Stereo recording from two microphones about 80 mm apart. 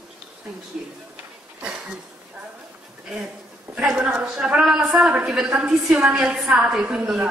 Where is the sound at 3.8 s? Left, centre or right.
Centre.